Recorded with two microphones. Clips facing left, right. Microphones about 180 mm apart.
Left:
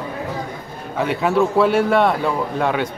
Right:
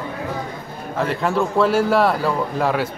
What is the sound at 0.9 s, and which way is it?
A man's voice, centre (ahead or behind).